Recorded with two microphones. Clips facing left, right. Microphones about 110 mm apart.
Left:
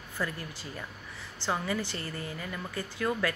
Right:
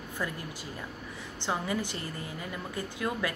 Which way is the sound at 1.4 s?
15° right (ahead or behind).